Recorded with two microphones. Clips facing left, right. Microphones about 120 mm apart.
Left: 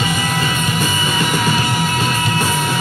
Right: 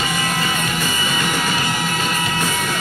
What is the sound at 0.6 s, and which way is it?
Music, 15° left (ahead or behind).